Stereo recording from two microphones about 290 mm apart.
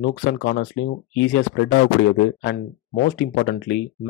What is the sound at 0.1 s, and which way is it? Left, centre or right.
Speech, left.